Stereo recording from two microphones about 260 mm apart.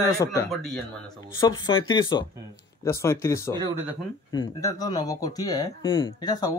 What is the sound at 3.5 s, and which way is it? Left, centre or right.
Speech, centre.